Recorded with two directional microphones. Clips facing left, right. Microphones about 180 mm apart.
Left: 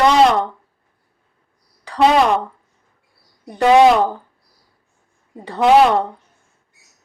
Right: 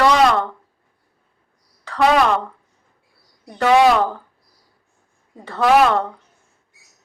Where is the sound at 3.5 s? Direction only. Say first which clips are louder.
Left 3 dB; 20° left (ahead or behind).